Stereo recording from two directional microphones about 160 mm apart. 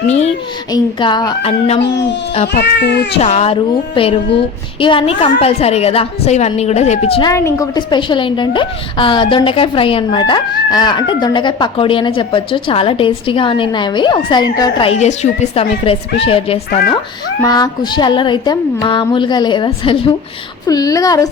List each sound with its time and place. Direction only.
0.7 s a woman's voice: 30° left (ahead or behind)
2.6 s speech: 90° left
3.2 s a woman's voice: 40° left (ahead or behind)
7.2 s a woman's voice: 20° left (ahead or behind)
14.8 s a woman's voice: 45° left (ahead or behind)
17.4 s a woman's voice: 25° left (ahead or behind)
20.7 s a woman's voice: 20° left (ahead or behind)